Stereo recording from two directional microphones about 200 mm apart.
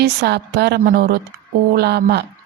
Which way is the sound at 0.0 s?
55° right (ahead or behind).